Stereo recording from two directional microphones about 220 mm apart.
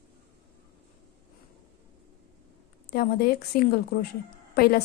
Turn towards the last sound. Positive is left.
turn(degrees=45)  # may be behind; listen again after turning